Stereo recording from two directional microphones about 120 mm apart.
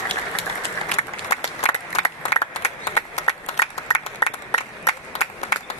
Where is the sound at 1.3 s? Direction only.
60° left (ahead or behind).